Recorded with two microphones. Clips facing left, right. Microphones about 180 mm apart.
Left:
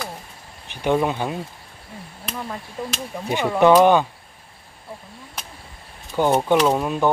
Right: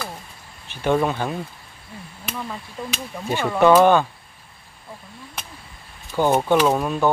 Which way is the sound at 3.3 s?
15° left (ahead or behind).